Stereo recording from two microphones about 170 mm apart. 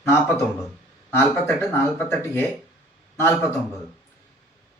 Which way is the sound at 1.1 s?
10° left (ahead or behind).